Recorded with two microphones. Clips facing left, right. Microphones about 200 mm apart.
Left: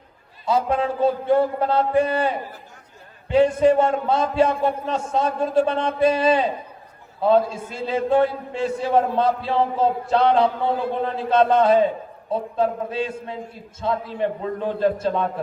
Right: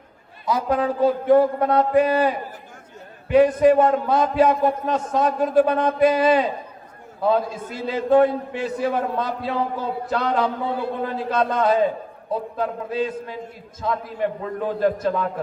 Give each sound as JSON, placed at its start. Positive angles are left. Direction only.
{"t": 0.4, "sound": "a man's voice", "side_deg": 25}